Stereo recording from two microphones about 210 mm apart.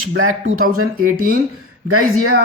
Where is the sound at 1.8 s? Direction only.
90° right.